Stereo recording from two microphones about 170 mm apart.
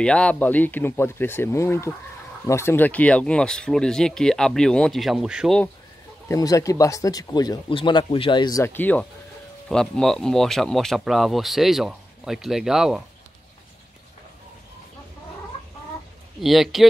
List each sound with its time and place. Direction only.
0.0 s speech: 5° left (ahead or behind)
6.2 s speech: 20° left (ahead or behind); by 13.0 s 5° right (ahead or behind)
16.3 s speech: centre (ahead or behind)